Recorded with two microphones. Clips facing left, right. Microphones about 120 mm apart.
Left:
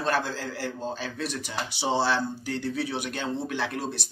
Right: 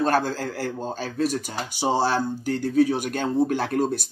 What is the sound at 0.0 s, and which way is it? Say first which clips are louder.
A man's voice: right 5 dB; 45° right (ahead or behind).